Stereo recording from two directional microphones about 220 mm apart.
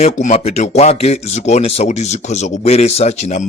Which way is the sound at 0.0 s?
30° left (ahead or behind).